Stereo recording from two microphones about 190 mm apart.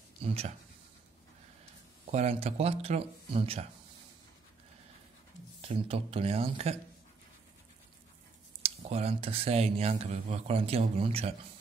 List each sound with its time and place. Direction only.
0.2 s speech: 30° right (ahead or behind)
2.0 s speech: 35° right (ahead or behind)
5.6 s speech: 30° right (ahead or behind)
8.9 s speech: 30° right (ahead or behind)